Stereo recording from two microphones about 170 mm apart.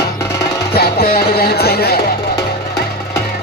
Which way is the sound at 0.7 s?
65° left (ahead or behind).